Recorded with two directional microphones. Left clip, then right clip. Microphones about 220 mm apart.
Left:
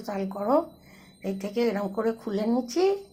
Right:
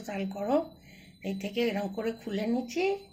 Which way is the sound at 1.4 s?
60° left (ahead or behind).